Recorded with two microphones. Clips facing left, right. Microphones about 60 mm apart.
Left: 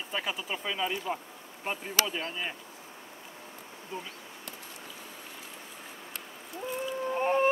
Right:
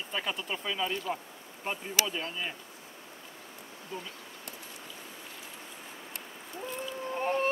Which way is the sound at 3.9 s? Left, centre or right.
Left.